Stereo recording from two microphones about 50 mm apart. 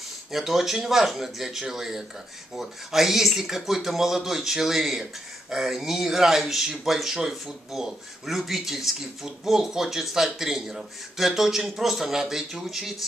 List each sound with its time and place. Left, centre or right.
0.3 s speech: centre